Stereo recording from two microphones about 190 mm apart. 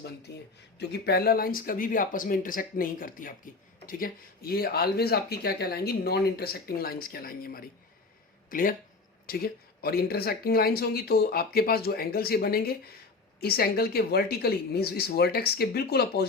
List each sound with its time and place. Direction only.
0.8 s speech: 55° left (ahead or behind)